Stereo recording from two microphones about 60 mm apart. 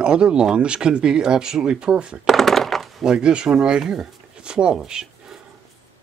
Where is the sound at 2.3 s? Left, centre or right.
Centre.